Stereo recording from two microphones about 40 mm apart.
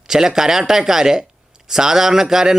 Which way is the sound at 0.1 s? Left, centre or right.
Centre.